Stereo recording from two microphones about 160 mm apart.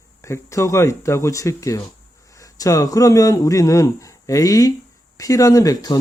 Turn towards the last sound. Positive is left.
turn(degrees=25)  # may be behind; listen again after turning